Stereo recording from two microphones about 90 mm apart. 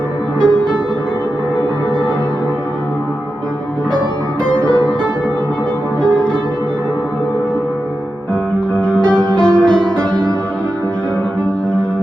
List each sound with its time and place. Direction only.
0.3 s music: 10° left (ahead or behind)
4.5 s music: 10° left (ahead or behind)
8.7 s music: 10° left (ahead or behind)
9.1 s music: 55° left (ahead or behind)
9.6 s music: 10° left (ahead or behind)